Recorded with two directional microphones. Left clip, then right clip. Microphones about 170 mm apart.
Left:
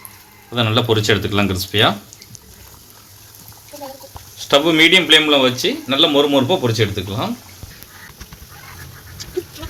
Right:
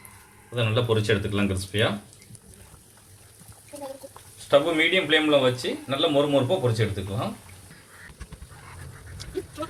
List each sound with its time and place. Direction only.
0.5 s speech: 65° left (ahead or behind)
4.4 s speech: 60° left (ahead or behind)